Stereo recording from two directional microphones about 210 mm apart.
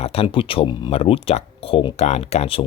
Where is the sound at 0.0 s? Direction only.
30° left (ahead or behind).